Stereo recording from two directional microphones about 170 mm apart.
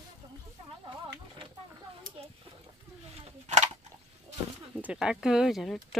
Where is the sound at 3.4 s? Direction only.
45° right (ahead or behind).